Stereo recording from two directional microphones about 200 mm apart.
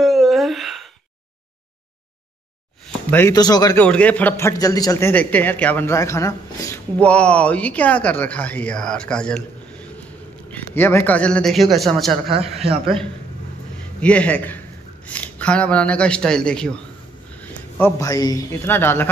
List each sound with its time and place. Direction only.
0.0 s a sound: centre (ahead or behind)
3.1 s a man's voice: 10° left (ahead or behind)
3.8 s a man's voice: 5° left (ahead or behind)
12.6 s a man's voice: 30° right (ahead or behind)
14.0 s a man's voice: 5° left (ahead or behind)